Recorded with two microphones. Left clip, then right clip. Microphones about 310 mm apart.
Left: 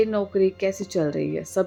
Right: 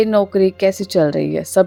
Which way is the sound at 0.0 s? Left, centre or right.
Right.